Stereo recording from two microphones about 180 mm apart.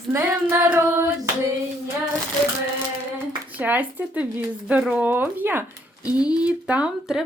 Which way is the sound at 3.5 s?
10° right (ahead or behind).